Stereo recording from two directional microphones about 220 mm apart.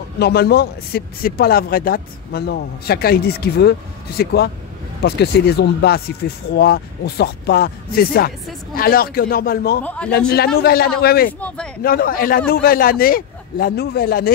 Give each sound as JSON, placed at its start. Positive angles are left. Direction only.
{"t": 0.2, "sound": "a man's voice", "side_deg": 45}
{"t": 9.8, "sound": "speech", "side_deg": 5}
{"t": 10.1, "sound": "a man's voice", "side_deg": 45}
{"t": 11.4, "sound": "speech", "side_deg": 5}
{"t": 11.8, "sound": "a man's voice", "side_deg": 40}